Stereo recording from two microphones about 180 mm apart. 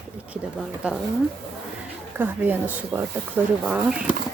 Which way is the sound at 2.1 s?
10° right (ahead or behind).